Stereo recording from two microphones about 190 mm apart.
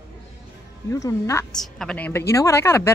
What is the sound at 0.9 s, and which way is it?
Speech, 15° left (ahead or behind).